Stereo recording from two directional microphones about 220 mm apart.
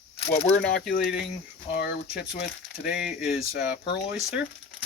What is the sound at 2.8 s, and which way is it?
Speech, 5° right (ahead or behind).